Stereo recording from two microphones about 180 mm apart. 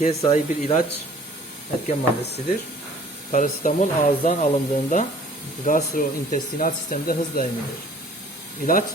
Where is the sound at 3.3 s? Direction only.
45° left (ahead or behind).